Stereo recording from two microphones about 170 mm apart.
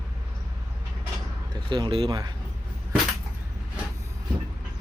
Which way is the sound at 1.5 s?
25° right (ahead or behind).